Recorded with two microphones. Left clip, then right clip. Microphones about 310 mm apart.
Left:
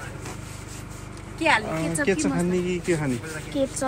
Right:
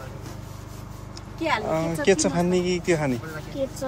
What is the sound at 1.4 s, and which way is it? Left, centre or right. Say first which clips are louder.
Speech: left 2 dB; centre.